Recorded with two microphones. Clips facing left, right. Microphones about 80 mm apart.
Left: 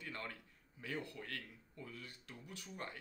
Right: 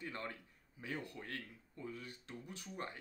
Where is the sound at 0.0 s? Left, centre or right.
Right.